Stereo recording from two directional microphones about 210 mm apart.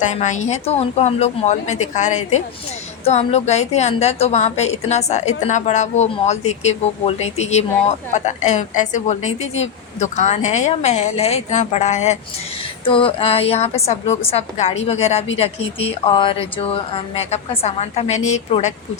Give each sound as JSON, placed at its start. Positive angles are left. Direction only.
{"t": 0.0, "sound": "a woman's voice", "side_deg": 35}